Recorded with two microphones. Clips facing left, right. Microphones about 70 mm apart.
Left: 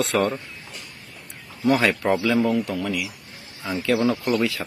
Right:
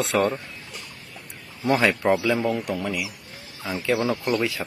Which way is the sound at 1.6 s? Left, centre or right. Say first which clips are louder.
Left 1 dB; right.